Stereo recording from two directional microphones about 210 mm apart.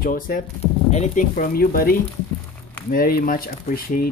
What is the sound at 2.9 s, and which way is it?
Speech, 45° left (ahead or behind).